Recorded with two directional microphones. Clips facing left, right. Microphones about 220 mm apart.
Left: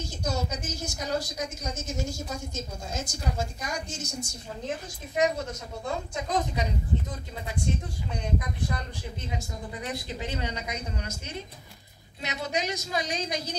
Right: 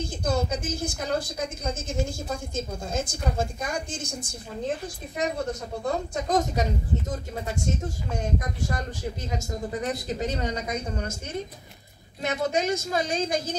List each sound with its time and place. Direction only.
0.0 s a woman's voice: 55° right (ahead or behind)
5.2 s a woman's voice: 35° right (ahead or behind)
12.2 s a woman's voice: 50° right (ahead or behind)